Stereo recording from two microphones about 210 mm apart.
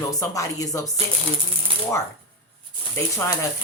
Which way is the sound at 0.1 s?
15° left (ahead or behind).